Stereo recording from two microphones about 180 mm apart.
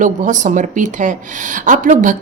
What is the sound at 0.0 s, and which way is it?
A woman's voice, 45° right (ahead or behind).